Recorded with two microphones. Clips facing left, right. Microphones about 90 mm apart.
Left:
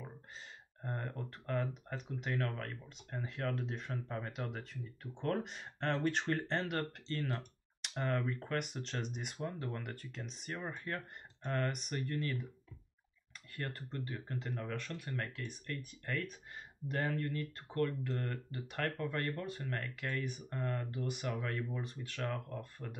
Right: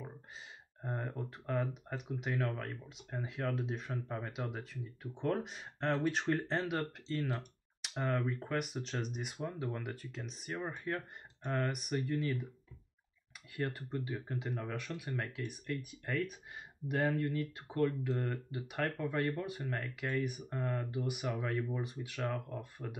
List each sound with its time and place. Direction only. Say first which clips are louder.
0.8 s speech: right 2 dB; 10° right (ahead or behind)
13.6 s speech: right 5 dB; 15° right (ahead or behind)